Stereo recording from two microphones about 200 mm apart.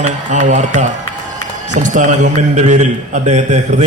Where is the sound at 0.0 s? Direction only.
40° right (ahead or behind).